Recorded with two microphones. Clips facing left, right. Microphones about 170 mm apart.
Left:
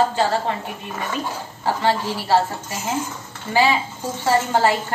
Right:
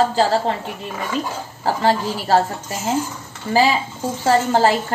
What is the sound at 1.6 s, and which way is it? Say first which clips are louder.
Speech: right 2 dB; 40° right (ahead or behind).